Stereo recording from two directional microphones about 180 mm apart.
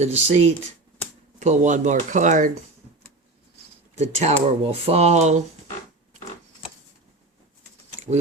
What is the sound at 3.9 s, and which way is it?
Speech, 40° right (ahead or behind).